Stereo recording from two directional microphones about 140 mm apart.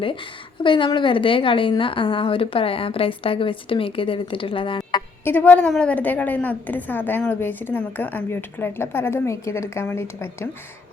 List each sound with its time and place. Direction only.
0.6 s a woman's voice: 35° left (ahead or behind)
5.2 s a woman's voice: 15° left (ahead or behind)